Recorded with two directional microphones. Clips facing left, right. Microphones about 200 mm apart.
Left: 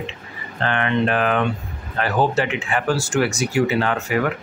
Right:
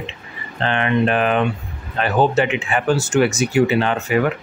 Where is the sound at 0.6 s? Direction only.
20° right (ahead or behind).